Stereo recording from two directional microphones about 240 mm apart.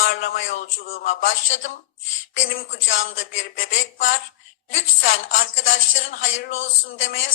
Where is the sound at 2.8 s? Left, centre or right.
Left.